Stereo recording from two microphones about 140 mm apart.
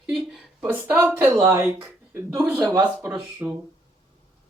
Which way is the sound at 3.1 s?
5° right (ahead or behind).